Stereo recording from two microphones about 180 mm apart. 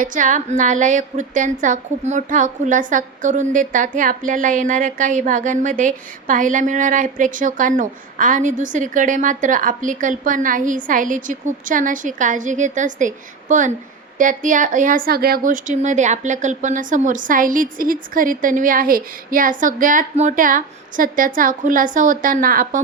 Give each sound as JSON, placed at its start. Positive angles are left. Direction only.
{"t": 0.0, "sound": "a woman's voice", "side_deg": -45}